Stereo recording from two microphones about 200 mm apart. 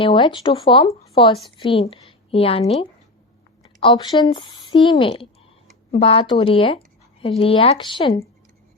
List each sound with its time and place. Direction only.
0.0 s a woman's voice: 25° left (ahead or behind)
3.8 s speech: 25° left (ahead or behind)